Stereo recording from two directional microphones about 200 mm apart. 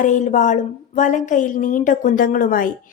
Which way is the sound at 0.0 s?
40° left (ahead or behind).